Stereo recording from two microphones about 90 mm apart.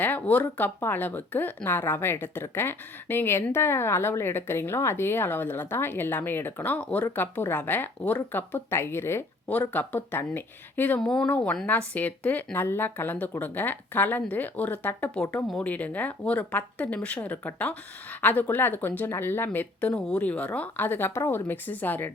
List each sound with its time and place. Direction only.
0.0 s speech: 20° left (ahead or behind)
9.5 s speech: 20° left (ahead or behind)
11.0 s speech: 5° left (ahead or behind); by 19.5 s 25° left (ahead or behind)
19.9 s speech: 10° left (ahead or behind)